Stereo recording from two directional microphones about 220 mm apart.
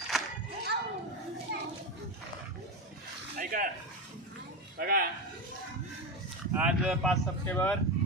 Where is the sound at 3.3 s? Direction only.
40° right (ahead or behind).